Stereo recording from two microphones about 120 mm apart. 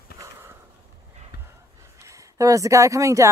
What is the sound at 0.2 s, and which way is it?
Sniff, 20° right (ahead or behind).